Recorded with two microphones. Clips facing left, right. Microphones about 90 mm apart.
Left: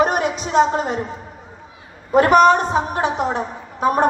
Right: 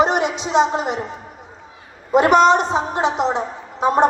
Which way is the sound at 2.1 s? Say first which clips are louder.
Left 1 dB; 20° right (ahead or behind).